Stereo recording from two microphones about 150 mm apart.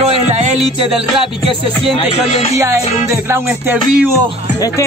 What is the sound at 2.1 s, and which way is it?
Music, 45° left (ahead or behind).